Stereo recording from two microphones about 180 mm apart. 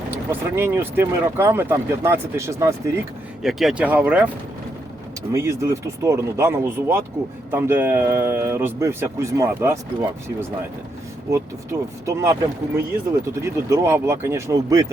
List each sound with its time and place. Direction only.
0.3 s a man's voice: 10° right (ahead or behind)
3.4 s a man's voice: centre (ahead or behind)
5.3 s a man's voice: 15° right (ahead or behind)